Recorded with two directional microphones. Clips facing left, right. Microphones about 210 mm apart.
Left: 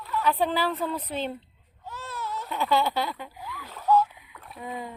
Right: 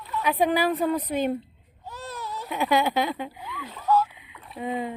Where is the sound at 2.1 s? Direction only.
15° right (ahead or behind).